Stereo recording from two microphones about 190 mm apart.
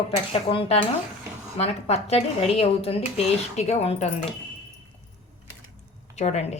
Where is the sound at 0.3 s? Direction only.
30° left (ahead or behind).